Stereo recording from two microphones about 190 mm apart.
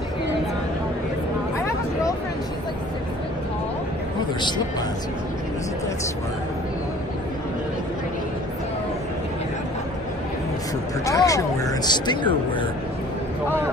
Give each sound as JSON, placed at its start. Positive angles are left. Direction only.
{"t": 4.4, "sound": "speech", "side_deg": 25}
{"t": 11.1, "sound": "speech", "side_deg": 15}